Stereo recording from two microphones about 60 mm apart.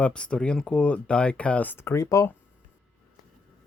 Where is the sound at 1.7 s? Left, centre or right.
Left.